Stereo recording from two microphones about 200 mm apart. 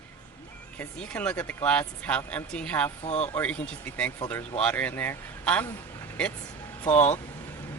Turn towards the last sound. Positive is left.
turn(degrees=10)  # may be behind; listen again after turning